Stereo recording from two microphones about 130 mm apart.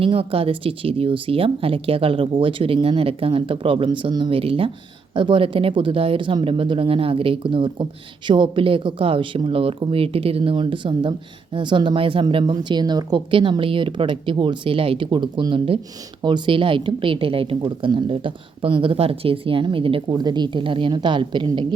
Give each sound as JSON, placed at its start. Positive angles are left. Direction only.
{"t": 0.0, "sound": "a woman's voice", "side_deg": -45}